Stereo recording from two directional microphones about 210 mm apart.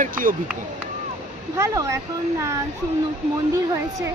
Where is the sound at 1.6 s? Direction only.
15° right (ahead or behind).